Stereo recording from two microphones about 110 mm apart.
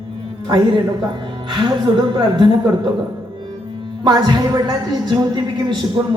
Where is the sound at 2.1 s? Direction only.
40° right (ahead or behind).